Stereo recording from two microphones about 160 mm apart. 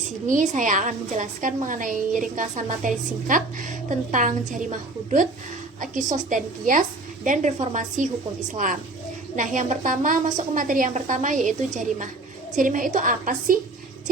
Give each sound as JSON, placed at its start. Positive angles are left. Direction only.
{"t": 0.3, "sound": "a woman's voice", "side_deg": -50}
{"t": 5.8, "sound": "a woman's voice", "side_deg": -55}